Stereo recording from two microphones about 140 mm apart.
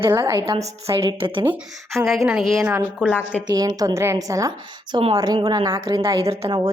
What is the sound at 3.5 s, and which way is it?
A woman's voice, 25° right (ahead or behind).